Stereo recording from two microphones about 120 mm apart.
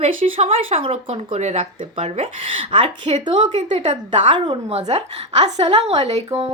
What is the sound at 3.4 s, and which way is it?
Speech, 65° right (ahead or behind).